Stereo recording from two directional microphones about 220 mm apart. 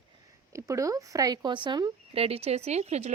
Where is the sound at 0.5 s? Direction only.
15° right (ahead or behind).